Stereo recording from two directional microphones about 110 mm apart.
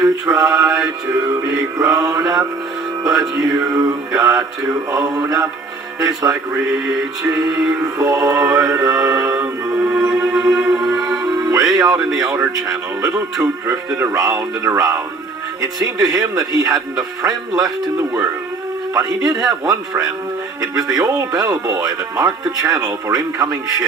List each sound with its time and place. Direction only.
0.0 s mantra: 30° right (ahead or behind)
1.1 s speech: 35° right (ahead or behind)
7.3 s music: 30° right (ahead or behind)
7.9 s speech: 30° right (ahead or behind)
9.7 s music: 15° right (ahead or behind)
11.2 s music: 35° right (ahead or behind)
12.2 s speech: 30° right (ahead or behind)
16.0 s speech: 35° right (ahead or behind)
18.9 s speech: 35° right (ahead or behind)